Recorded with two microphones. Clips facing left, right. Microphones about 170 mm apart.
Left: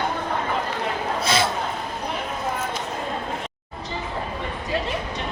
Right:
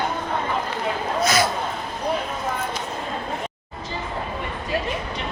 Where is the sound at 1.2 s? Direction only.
30° left (ahead or behind).